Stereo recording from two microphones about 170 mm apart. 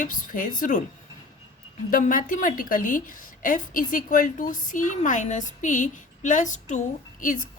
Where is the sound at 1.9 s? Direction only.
50° left (ahead or behind).